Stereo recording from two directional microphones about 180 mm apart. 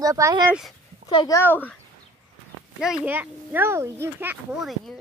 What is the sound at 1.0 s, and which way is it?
Speech, 20° left (ahead or behind).